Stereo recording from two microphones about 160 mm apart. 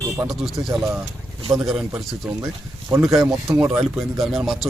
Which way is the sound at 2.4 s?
15° right (ahead or behind).